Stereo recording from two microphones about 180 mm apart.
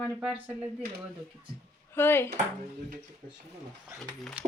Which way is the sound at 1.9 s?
10° left (ahead or behind).